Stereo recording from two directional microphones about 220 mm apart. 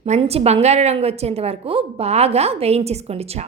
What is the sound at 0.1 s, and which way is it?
A woman's voice, 25° right (ahead or behind).